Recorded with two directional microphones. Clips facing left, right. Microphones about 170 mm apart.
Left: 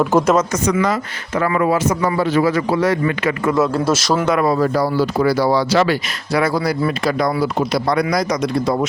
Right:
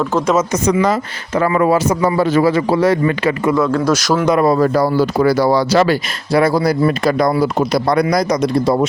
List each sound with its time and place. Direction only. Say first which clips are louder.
0.0 s a woman's voice: left 2 dB; 10° left (ahead or behind)
0.7 s speech: right 5 dB; 30° right (ahead or behind)
2.5 s speech: right 3 dB; 30° right (ahead or behind)
3.5 s a man's voice: right 1 dB; 5° left (ahead or behind)
4.4 s speech: right 3 dB; 45° right (ahead or behind)